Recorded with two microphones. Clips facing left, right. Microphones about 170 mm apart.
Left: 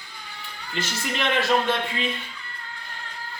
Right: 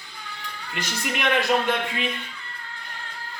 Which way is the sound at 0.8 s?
15° right (ahead or behind).